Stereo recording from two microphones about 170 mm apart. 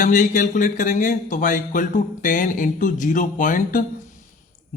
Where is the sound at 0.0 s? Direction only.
45° left (ahead or behind).